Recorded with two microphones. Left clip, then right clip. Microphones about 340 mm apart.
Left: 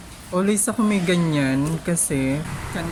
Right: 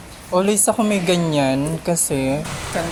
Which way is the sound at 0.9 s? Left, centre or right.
Right.